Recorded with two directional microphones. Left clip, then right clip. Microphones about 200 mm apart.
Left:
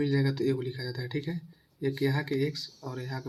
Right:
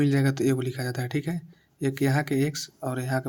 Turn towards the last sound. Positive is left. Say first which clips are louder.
# right 10 dB
turn(degrees=-50)  # may be behind; listen again after turning